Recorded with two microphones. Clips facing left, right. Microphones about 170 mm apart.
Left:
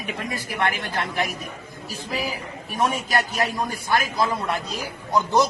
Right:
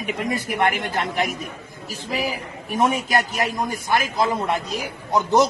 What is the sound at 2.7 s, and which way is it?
A man's voice, 20° right (ahead or behind).